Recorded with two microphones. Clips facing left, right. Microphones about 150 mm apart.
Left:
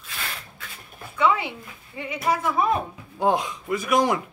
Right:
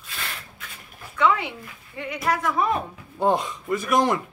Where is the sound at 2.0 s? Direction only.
15° left (ahead or behind).